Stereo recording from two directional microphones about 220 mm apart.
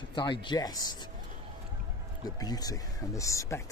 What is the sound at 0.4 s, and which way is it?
Speech, 20° left (ahead or behind).